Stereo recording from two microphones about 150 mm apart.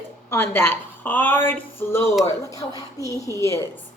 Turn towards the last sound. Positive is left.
turn(degrees=20)  # may be behind; listen again after turning